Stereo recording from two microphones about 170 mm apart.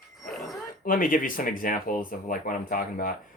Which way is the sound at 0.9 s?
55° left (ahead or behind).